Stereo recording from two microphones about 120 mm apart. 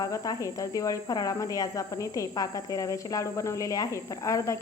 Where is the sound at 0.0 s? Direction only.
30° left (ahead or behind).